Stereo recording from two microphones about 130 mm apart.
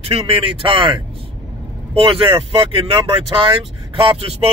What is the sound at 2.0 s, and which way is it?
Speech, 40° right (ahead or behind).